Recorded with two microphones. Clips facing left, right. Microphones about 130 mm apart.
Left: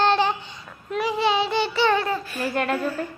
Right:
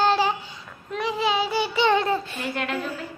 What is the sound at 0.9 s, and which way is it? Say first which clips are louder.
Child singing: left 2 dB; centre (ahead or behind).